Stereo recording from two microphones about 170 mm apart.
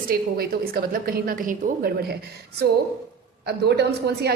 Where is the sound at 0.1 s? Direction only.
60° right (ahead or behind).